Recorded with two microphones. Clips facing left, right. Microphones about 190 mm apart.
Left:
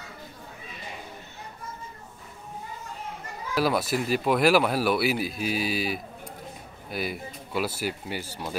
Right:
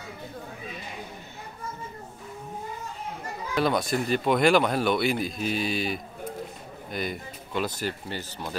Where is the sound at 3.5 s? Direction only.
5° left (ahead or behind).